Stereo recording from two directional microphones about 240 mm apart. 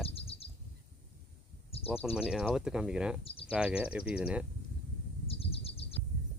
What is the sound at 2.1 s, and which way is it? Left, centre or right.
Speech, centre.